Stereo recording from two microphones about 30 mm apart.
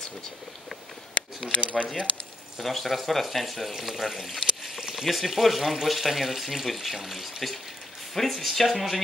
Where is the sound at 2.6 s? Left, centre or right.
Centre.